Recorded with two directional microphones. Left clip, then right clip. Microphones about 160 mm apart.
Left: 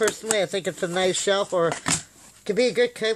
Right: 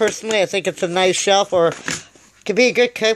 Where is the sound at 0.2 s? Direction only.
20° right (ahead or behind).